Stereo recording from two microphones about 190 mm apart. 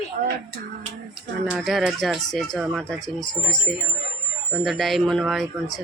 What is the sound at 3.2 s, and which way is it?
Speech, 25° left (ahead or behind).